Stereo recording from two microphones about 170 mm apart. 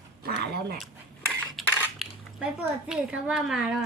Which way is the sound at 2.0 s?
Centre (ahead or behind).